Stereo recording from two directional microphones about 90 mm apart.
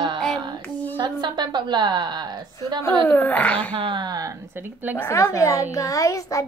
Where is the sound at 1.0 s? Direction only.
55° right (ahead or behind).